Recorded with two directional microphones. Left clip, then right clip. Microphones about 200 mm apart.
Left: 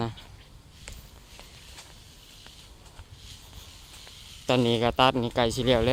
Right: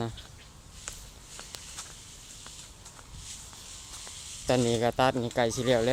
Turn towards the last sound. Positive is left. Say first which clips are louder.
# left 2 dB
turn(degrees=15)  # may be behind; listen again after turning